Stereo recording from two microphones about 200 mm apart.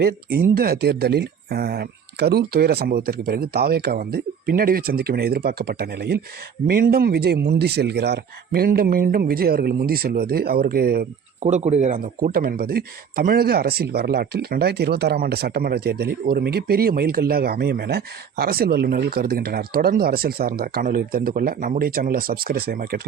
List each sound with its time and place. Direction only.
0.5 s speech: 50° right (ahead or behind)
11.4 s speech: 35° right (ahead or behind)
12.0 s speech: 45° right (ahead or behind)